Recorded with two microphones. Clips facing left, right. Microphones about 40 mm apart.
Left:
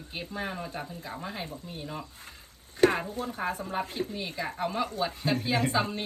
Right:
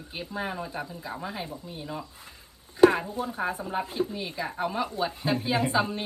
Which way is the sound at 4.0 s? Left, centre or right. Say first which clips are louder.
Right 4 dB; centre.